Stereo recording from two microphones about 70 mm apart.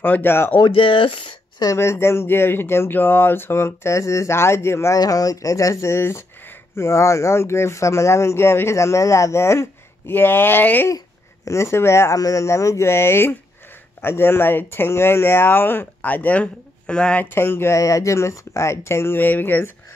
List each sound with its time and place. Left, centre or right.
0.0 s speech: left
1.8 s speech: left
4.9 s speech: left
11.4 s speech: left
12.2 s speech: left; by 17.2 s centre
17.2 s speech: left
17.7 s speech: left